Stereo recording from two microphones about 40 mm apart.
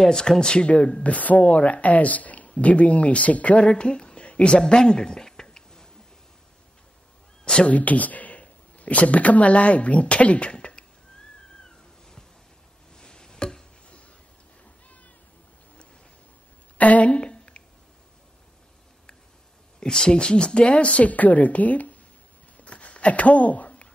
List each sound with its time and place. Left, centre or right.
0.0 s speech: centre
0.7 s a woman's voice: left; by 5.9 s centre
7.6 s speech: left
12.9 s a sound: centre
16.7 s speech: left
17.1 s a sound: left
19.8 s speech: centre
20.8 s a woman's voice: left
22.7 s a sound: left